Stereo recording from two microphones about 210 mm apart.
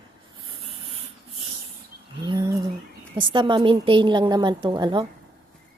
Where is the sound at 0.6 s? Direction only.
25° right (ahead or behind).